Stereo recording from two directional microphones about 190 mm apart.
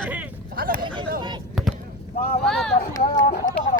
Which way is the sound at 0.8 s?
25° right (ahead or behind).